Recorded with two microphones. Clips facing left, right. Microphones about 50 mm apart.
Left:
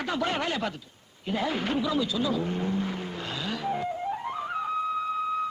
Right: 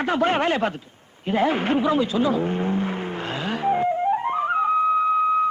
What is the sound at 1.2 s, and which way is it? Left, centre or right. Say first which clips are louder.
Vehicle: right 8 dB; right.